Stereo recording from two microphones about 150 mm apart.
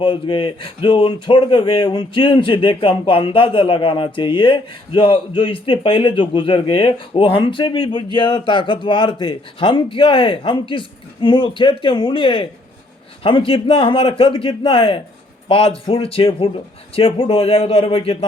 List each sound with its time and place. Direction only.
0.0 s speech: 35° left (ahead or behind)